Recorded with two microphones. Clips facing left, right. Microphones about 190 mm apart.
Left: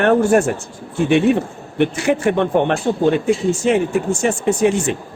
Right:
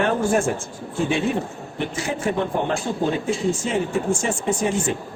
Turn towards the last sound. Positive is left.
turn(degrees=70)  # may be behind; listen again after turning